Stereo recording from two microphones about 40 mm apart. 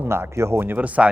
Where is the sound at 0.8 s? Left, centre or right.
Right.